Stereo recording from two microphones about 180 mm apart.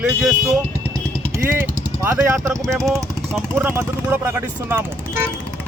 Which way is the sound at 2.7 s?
Centre (ahead or behind).